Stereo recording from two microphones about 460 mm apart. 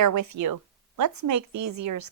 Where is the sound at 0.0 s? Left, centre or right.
Right.